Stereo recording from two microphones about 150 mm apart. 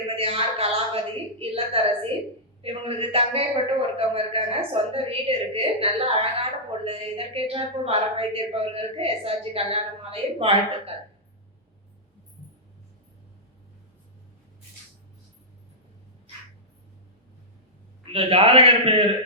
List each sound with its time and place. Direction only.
0.2 s a sound: 40° right (ahead or behind)
2.6 s a man's voice: 40° right (ahead or behind)
18.0 s a woman's voice: 40° right (ahead or behind)